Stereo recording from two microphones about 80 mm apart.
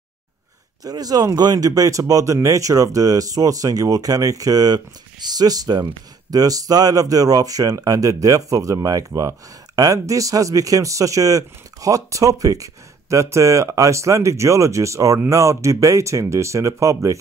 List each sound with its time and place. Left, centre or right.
0.8 s speech: right